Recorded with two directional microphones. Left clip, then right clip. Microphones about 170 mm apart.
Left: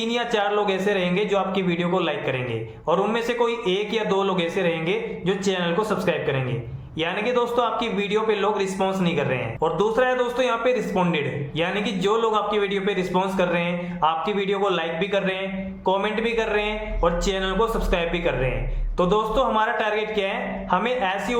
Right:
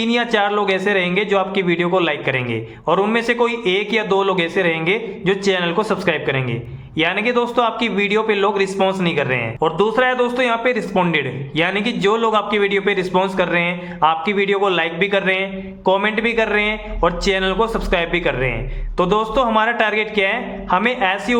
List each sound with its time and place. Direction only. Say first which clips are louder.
0.0 s a man's voice: right 6 dB; 25° right (ahead or behind)